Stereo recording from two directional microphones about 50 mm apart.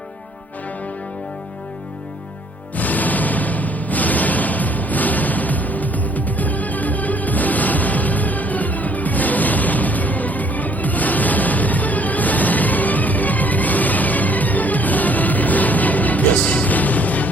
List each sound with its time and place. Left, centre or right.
2.7 s music: left